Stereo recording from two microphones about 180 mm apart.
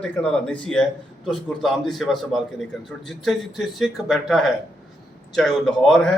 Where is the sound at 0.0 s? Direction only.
5° left (ahead or behind).